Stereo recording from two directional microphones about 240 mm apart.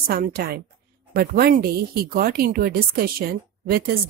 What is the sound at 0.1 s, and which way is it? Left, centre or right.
Speech, right.